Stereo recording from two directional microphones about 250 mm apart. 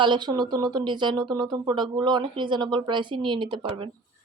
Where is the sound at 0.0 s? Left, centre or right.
Centre.